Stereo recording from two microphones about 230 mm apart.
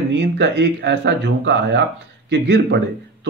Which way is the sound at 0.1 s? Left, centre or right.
Right.